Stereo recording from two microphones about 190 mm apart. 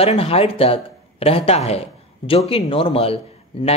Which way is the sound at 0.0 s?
30° left (ahead or behind).